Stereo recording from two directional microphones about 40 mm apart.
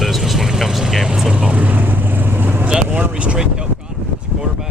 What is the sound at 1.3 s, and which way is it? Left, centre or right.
Vehicle, right.